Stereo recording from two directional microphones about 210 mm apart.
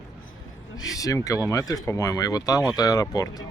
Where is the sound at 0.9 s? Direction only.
15° left (ahead or behind).